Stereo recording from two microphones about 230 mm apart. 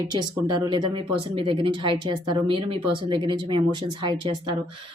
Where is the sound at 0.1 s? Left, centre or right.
Centre.